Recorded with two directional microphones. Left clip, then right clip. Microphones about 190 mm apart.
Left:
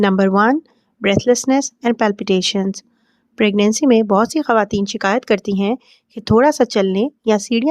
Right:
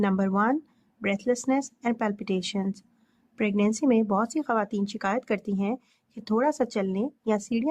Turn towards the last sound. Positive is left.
turn(degrees=45)  # may be behind; listen again after turning